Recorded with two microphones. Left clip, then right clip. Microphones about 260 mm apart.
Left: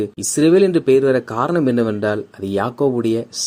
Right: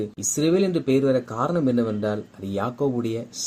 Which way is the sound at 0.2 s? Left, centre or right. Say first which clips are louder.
Left 8 dB; left.